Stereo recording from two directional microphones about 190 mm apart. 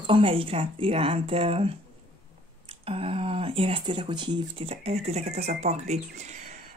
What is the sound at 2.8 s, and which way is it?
A woman's voice, 30° right (ahead or behind).